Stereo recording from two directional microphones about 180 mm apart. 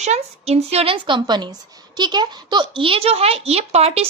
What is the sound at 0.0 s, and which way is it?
Speech, 35° right (ahead or behind).